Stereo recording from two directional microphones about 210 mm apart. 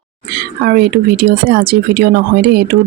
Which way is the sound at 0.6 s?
45° right (ahead or behind).